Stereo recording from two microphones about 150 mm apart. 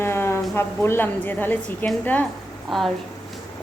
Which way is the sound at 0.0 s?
15° left (ahead or behind).